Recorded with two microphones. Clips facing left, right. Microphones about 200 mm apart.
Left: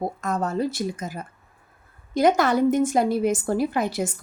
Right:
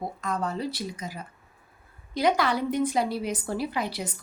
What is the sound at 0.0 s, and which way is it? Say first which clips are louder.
Speech: left 4 dB; 50° left (ahead or behind).